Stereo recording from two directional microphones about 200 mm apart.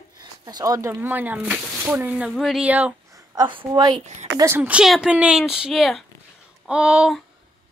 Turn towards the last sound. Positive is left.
turn(degrees=-5)  # may be behind; listen again after turning